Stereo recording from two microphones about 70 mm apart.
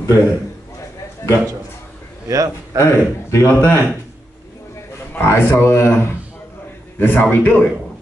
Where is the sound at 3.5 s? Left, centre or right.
Left.